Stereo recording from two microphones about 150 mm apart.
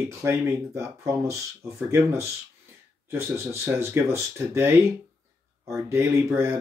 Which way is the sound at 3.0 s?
15° right (ahead or behind).